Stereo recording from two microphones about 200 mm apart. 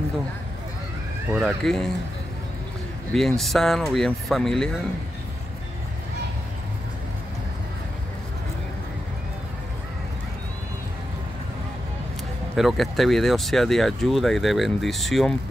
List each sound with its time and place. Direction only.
1.3 s speech: centre (ahead or behind)
3.1 s speech: centre (ahead or behind)
12.5 s speech: centre (ahead or behind)